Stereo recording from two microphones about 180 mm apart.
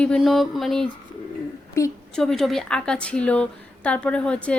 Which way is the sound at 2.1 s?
Centre (ahead or behind).